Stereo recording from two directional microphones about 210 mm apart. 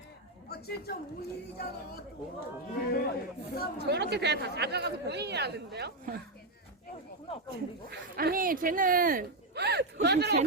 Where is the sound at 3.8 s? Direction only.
55° right (ahead or behind).